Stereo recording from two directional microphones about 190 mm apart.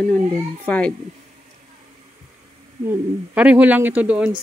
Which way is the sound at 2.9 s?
10° right (ahead or behind).